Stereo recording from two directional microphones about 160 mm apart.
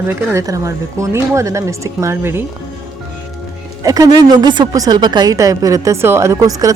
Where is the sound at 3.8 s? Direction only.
20° right (ahead or behind).